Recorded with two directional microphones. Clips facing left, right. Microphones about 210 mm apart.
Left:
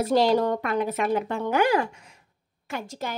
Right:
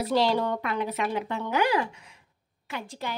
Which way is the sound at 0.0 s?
45° left (ahead or behind).